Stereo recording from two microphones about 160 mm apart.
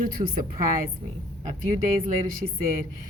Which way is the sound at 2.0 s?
55° right (ahead or behind).